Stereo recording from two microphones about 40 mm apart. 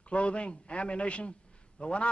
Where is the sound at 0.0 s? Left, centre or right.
Left.